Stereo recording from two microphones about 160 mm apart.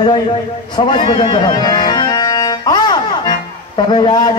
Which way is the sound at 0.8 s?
30° left (ahead or behind).